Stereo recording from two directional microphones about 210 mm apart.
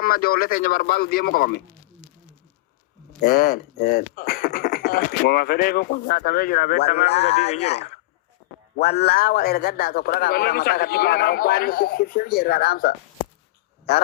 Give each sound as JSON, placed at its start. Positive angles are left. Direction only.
{"t": 0.0, "sound": "speech", "side_deg": 45}
{"t": 3.2, "sound": "speech", "side_deg": 45}
{"t": 9.1, "sound": "speech", "side_deg": 45}